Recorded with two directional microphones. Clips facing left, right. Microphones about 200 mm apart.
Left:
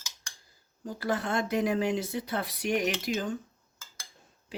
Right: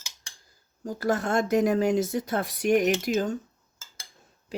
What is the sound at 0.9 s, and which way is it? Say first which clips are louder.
Speech: right 4 dB; 45° right (ahead or behind).